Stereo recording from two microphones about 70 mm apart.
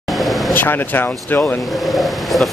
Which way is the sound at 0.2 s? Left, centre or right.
Centre.